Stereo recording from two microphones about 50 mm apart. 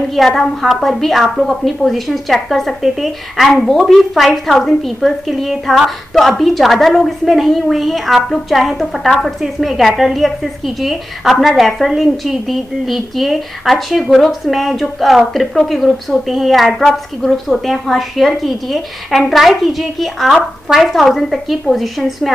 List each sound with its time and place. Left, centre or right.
0.1 s a woman's voice: centre